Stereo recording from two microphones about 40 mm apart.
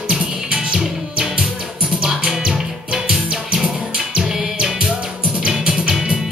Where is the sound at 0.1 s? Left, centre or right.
Right.